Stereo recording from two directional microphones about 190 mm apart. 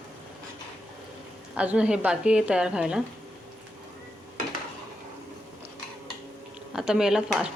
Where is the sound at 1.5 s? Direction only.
5° right (ahead or behind).